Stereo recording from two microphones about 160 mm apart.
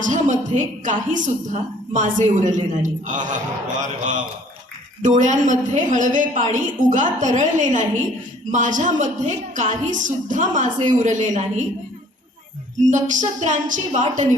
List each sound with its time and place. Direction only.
0.0 s a woman's voice: 50° right (ahead or behind)
12.8 s a woman's voice: 50° right (ahead or behind)